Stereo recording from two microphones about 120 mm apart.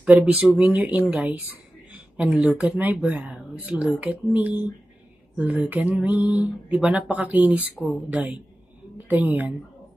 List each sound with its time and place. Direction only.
0.0 s speech: 10° right (ahead or behind)
2.1 s a woman's voice: 10° right (ahead or behind)